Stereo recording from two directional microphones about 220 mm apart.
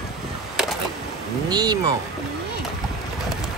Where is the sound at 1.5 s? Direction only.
20° right (ahead or behind).